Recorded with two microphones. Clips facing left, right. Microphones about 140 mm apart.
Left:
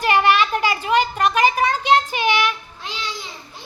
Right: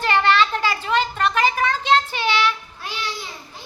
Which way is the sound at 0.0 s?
15° left (ahead or behind).